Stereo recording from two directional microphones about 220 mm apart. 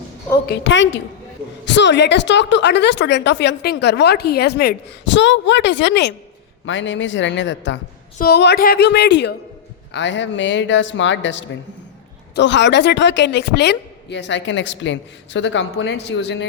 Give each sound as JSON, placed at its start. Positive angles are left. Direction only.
{"t": 0.4, "sound": "a woman's voice", "side_deg": 55}